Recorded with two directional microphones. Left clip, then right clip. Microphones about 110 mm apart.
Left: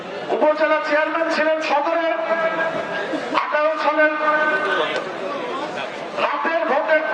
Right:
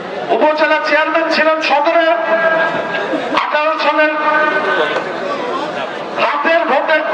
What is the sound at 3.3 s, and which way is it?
Bow-wow, 10° right (ahead or behind).